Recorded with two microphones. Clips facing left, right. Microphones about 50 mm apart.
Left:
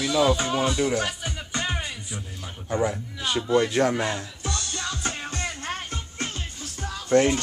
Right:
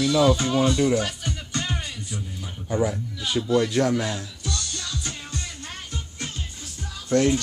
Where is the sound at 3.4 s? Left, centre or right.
Centre.